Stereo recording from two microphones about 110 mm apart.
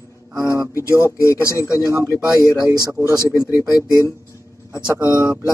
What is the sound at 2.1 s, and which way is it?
Speech, 5° right (ahead or behind).